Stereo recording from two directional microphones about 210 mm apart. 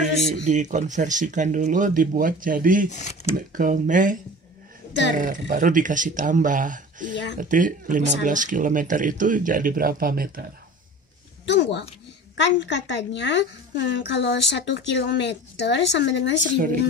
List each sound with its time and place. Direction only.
0.5 s speech: 35° right (ahead or behind)
2.9 s speech: 35° left (ahead or behind)
3.3 s speech: 40° right (ahead or behind)
11.4 s a woman's voice: 55° left (ahead or behind)